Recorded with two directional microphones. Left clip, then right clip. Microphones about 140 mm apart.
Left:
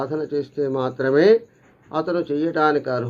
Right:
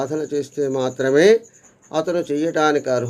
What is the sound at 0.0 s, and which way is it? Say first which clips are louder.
Speech: right 1 dB; 40° right (ahead or behind).